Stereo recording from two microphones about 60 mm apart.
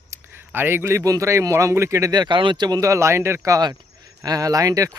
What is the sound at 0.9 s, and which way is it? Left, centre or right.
Speech, right.